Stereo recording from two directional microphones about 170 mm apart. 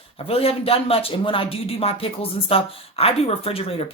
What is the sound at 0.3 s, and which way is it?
Speech, 35° left (ahead or behind).